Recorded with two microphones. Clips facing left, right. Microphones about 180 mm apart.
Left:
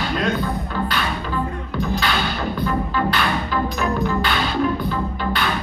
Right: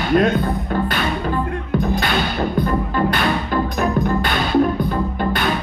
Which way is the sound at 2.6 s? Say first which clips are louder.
Right 1 dB; 50° right (ahead or behind).